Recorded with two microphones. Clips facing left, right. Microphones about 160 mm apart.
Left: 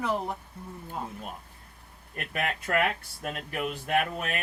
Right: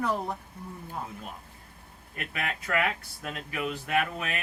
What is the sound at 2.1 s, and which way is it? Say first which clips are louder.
Speech: left 3 dB; 45° left (ahead or behind).